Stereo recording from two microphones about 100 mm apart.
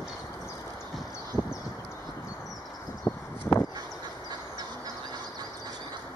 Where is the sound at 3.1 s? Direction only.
25° left (ahead or behind).